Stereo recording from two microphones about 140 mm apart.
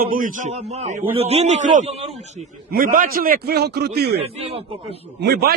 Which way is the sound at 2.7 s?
85° right.